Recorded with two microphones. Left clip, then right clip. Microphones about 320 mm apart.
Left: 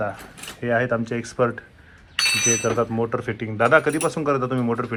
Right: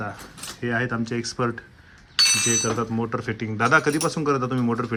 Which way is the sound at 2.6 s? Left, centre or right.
Centre.